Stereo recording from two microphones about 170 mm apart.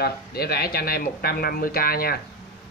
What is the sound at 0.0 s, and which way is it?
Speech, 65° left (ahead or behind).